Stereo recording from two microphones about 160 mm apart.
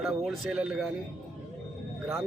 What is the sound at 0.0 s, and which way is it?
Speech, 5° right (ahead or behind).